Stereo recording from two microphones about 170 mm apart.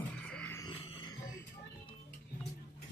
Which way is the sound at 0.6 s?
30° left (ahead or behind).